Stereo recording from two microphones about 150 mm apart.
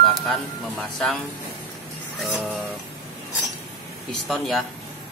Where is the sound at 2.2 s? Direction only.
10° right (ahead or behind).